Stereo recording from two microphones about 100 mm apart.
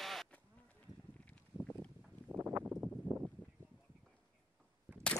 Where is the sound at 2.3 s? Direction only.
30° right (ahead or behind).